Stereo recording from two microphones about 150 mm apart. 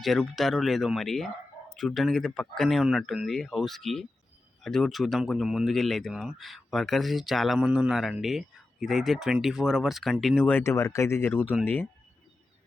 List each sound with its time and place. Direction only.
0.0 s speech: centre (ahead or behind)
10.6 s speech: 20° left (ahead or behind)